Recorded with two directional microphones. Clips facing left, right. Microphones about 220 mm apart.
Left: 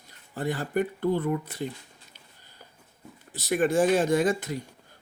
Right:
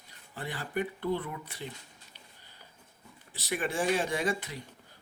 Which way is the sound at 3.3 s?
45° left (ahead or behind).